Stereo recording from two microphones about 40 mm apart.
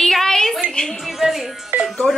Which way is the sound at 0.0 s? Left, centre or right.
Centre.